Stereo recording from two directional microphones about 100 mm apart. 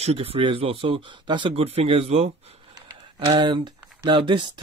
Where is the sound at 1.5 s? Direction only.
80° right.